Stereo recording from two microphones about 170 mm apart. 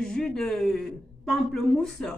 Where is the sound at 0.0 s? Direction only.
5° left (ahead or behind).